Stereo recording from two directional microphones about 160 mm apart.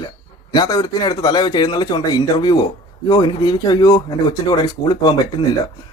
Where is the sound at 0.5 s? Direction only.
25° left (ahead or behind).